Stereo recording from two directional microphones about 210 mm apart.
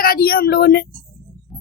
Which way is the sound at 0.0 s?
45° left (ahead or behind).